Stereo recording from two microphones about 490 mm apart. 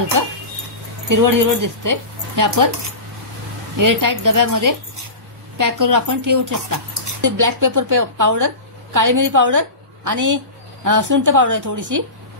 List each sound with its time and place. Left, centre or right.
1.1 s speech: right
3.7 s speech: right